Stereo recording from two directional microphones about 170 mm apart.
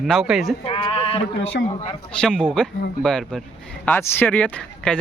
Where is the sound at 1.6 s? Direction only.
90° left.